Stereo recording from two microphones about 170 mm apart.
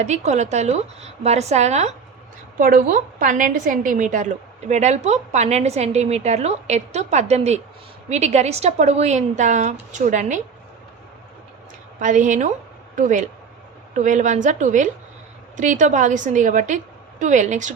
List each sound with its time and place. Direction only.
0.0 s a woman's voice: 40° right (ahead or behind)
2.6 s a woman's voice: 55° right (ahead or behind)
11.9 s a woman's voice: 45° right (ahead or behind)